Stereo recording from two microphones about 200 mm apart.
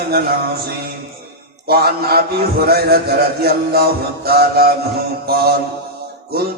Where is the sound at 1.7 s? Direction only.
50° right (ahead or behind).